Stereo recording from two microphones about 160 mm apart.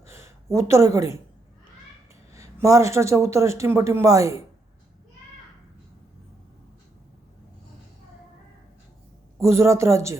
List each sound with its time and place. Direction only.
0.1 s speech: 15° right (ahead or behind)
2.3 s a man's voice: 20° right (ahead or behind)
9.4 s speech: 20° right (ahead or behind)